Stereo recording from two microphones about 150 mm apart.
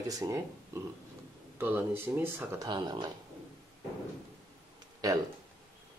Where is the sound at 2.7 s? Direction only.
30° right (ahead or behind).